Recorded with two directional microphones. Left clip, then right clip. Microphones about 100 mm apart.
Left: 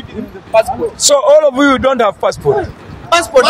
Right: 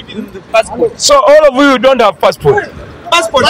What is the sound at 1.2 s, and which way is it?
Speech, 15° left (ahead or behind).